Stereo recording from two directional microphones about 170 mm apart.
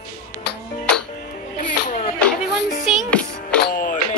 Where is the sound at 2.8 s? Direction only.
Centre (ahead or behind).